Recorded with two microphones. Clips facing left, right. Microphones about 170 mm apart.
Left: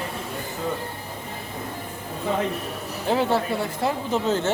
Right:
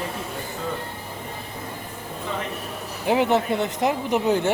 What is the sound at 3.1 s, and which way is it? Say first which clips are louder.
Speech: right 2 dB; 20° right (ahead or behind).